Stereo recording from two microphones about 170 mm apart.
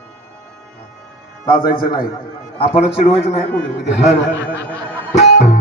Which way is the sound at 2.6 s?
35° left (ahead or behind).